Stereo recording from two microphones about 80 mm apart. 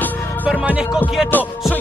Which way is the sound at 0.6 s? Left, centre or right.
Centre.